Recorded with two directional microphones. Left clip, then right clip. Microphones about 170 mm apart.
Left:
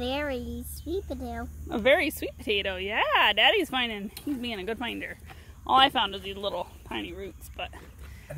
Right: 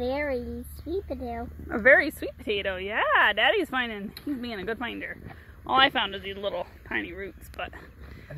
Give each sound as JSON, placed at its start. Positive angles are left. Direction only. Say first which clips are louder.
{"t": 0.0, "sound": "speech", "louder": "right 2 dB", "side_deg": 10}
{"t": 5.6, "sound": "speech", "louder": "left 1 dB", "side_deg": 10}